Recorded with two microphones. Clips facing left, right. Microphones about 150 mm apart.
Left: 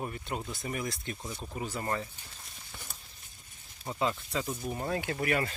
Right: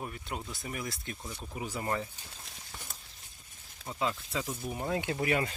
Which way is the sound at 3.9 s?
Centre (ahead or behind).